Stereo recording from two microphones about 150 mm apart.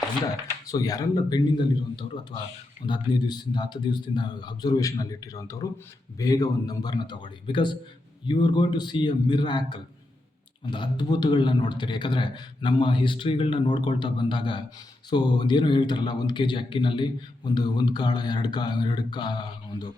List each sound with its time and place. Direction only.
0.7 s a man's voice: 25° left (ahead or behind)